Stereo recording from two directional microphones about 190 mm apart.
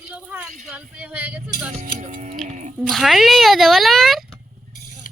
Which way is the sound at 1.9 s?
35° right (ahead or behind).